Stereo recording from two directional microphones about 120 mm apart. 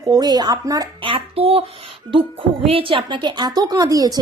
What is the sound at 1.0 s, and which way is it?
Speech, 50° right (ahead or behind).